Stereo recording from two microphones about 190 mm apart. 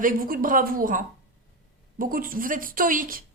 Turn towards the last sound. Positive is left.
turn(degrees=-45)  # may be behind; listen again after turning